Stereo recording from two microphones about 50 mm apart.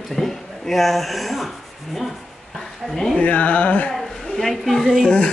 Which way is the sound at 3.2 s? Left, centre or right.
Left.